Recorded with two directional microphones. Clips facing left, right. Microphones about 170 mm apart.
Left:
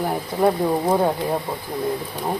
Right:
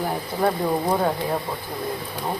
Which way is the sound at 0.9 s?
15° left (ahead or behind).